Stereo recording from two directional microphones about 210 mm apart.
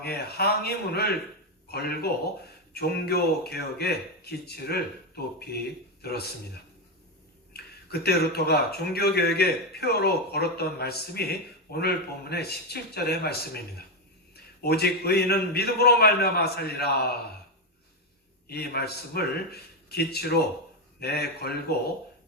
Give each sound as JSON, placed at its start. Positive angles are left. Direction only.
{"t": 0.0, "sound": "a man's voice", "side_deg": 50}
{"t": 7.5, "sound": "speech", "side_deg": 50}
{"t": 18.4, "sound": "speech", "side_deg": 50}